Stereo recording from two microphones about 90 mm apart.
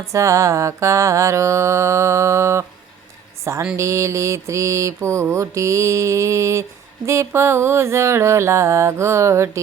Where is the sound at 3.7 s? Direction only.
35° right (ahead or behind).